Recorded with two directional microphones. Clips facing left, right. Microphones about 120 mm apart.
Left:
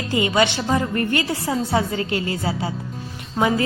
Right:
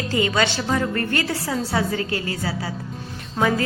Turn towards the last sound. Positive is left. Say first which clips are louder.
# left 1 dB
turn(degrees=10)  # may be behind; listen again after turning